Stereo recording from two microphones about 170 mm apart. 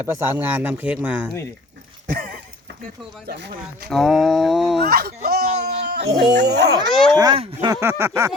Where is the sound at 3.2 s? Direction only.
75° right (ahead or behind).